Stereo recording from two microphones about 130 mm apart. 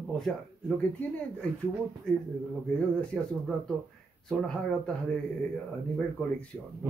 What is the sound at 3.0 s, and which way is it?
Speech, 5° left (ahead or behind).